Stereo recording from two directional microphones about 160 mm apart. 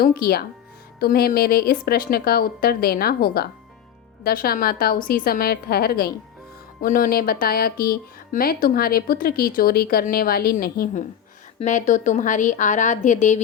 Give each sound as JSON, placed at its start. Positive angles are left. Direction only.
{"t": 0.0, "sound": "speech", "side_deg": 70}
{"t": 6.8, "sound": "speech", "side_deg": 60}
{"t": 11.6, "sound": "a woman's voice", "side_deg": 50}